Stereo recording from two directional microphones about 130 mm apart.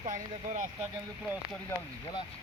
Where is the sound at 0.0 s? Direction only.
75° right (ahead or behind).